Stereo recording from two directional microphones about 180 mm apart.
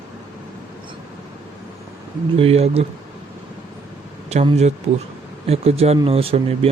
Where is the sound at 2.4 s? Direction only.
35° right (ahead or behind).